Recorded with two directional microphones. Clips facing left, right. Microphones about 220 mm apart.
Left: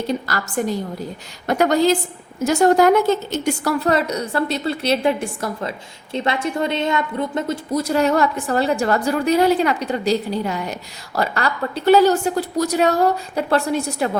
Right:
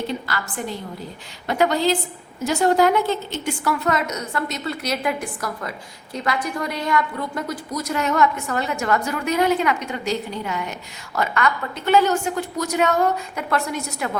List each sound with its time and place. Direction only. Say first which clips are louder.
0.1 s a woman's voice: left 5 dB; 40° left (ahead or behind)